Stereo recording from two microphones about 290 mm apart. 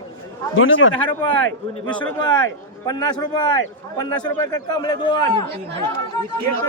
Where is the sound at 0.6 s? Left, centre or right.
Left.